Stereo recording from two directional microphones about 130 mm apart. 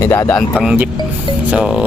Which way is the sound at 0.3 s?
10° left (ahead or behind).